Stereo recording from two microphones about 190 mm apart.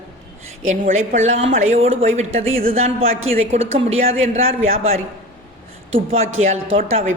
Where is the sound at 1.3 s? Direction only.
35° right (ahead or behind).